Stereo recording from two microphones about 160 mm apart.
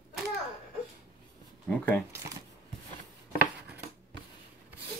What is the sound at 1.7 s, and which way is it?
Speech, 10° left (ahead or behind).